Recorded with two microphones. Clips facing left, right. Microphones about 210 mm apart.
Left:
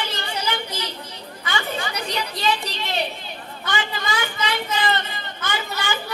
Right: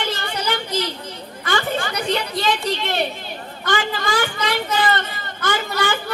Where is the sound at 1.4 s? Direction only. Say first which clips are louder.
Right 5 dB; 50° right (ahead or behind).